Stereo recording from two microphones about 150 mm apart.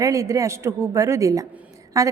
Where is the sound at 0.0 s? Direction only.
20° right (ahead or behind).